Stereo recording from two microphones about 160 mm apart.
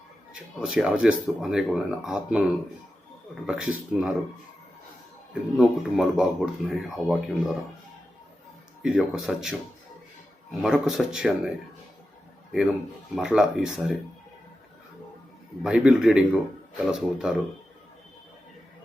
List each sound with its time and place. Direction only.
0.6 s speech: 5° right (ahead or behind)
3.4 s speech: 5° right (ahead or behind)
5.3 s speech: 5° right (ahead or behind)
8.8 s speech: 5° right (ahead or behind)
10.6 s speech: centre (ahead or behind)
13.1 s speech: 5° right (ahead or behind)
15.6 s speech: 5° right (ahead or behind)